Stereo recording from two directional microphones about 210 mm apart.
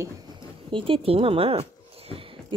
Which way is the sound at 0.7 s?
25° right (ahead or behind).